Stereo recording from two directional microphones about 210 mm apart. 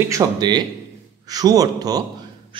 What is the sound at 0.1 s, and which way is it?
A man's voice, 20° right (ahead or behind).